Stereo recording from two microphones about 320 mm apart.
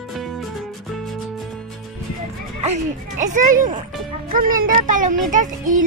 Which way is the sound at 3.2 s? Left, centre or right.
Right.